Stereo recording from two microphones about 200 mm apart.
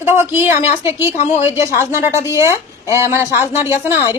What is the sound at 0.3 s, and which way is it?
A woman's voice, 10° right (ahead or behind).